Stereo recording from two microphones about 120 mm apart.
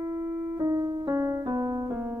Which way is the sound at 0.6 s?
30° right (ahead or behind).